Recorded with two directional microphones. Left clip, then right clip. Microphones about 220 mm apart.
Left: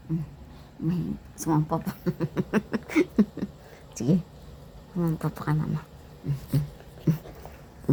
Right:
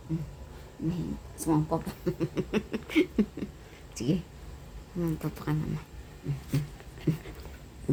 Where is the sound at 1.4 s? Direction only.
20° left (ahead or behind).